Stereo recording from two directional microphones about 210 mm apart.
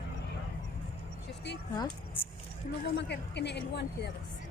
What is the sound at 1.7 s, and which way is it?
Speech, 15° left (ahead or behind).